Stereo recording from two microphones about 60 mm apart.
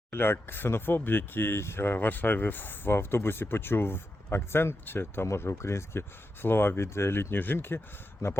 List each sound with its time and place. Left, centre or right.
0.1 s speech: left
5.2 s speech: left